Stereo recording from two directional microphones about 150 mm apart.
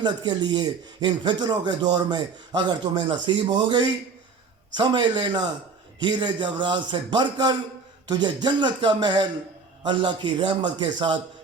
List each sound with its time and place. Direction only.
0.0 s speech: 30° right (ahead or behind)